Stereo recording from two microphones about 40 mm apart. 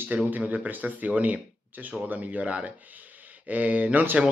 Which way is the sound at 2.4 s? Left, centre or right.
Right.